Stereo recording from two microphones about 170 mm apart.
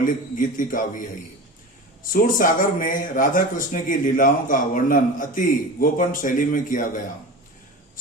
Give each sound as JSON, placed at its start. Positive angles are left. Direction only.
{"t": 0.0, "sound": "speech", "side_deg": 50}
{"t": 2.1, "sound": "speech", "side_deg": 55}